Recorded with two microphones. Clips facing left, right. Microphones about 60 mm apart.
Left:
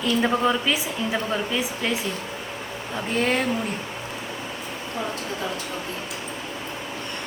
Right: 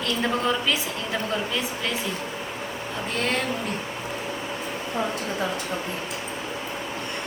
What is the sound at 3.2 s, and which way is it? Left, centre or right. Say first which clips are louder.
Speech: left 4 dB; centre.